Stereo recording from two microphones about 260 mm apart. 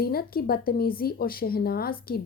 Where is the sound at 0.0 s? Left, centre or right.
Left.